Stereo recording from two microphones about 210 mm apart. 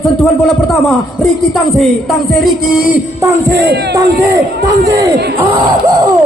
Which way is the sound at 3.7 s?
50° right (ahead or behind).